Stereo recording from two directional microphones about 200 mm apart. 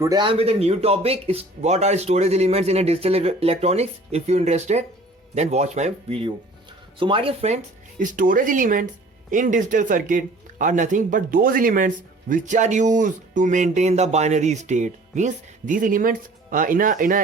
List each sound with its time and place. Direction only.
0.0 s speech: 20° right (ahead or behind); by 17.2 s 40° right (ahead or behind)